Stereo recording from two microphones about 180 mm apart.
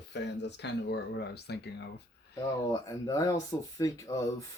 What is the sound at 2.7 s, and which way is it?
Speech, 20° left (ahead or behind).